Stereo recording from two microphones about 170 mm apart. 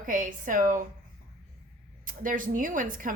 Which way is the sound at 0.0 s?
50° right (ahead or behind).